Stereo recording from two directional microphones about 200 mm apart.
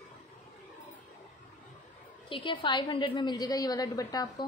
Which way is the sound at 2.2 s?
25° left (ahead or behind).